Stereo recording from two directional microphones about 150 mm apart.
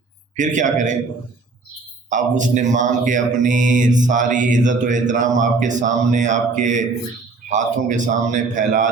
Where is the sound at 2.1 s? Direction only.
55° right (ahead or behind).